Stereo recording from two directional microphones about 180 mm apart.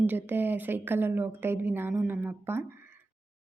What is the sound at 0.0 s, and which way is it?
Speech, 10° right (ahead or behind).